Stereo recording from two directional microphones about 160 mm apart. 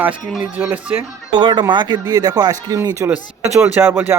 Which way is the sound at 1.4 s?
30° right (ahead or behind).